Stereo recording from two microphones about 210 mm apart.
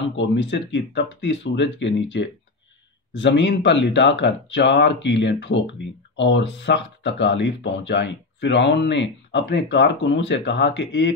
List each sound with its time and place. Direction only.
0.1 s speech: 60° left (ahead or behind)